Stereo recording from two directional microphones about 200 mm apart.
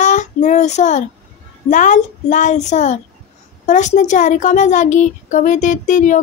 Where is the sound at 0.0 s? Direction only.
40° left (ahead or behind).